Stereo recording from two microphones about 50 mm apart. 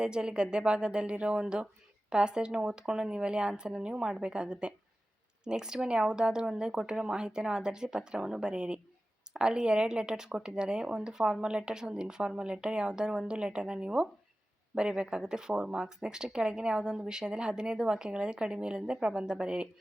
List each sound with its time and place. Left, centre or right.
0.0 s speech: centre